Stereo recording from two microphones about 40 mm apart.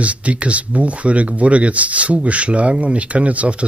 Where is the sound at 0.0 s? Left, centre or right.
Right.